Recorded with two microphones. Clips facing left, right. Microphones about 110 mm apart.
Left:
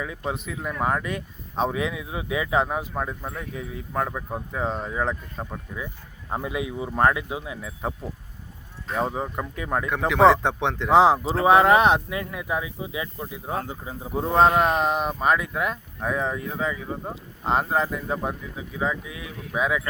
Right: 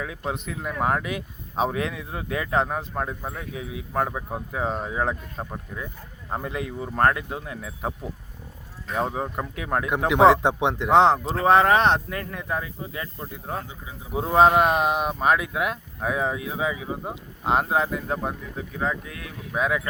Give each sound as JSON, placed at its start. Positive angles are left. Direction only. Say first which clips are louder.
{"t": 0.3, "sound": "speech", "louder": "even", "side_deg": 0}
{"t": 6.3, "sound": "speech", "louder": "left 1 dB", "side_deg": 5}
{"t": 10.4, "sound": "speech", "louder": "right 2 dB", "side_deg": -15}
{"t": 10.8, "sound": "speech", "louder": "left 1 dB", "side_deg": 5}
{"t": 13.6, "sound": "speech", "louder": "left 5 dB", "side_deg": 45}
{"t": 14.1, "sound": "speech", "louder": "right 1 dB", "side_deg": -5}